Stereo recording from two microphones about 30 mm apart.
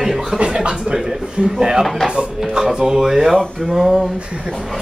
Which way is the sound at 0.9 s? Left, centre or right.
Centre.